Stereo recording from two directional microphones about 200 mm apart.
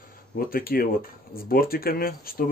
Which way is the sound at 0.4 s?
45° left (ahead or behind).